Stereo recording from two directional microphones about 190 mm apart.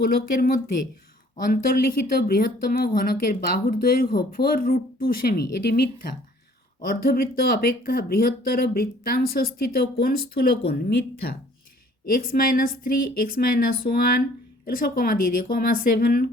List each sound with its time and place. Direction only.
0.0 s speech: 55° left (ahead or behind)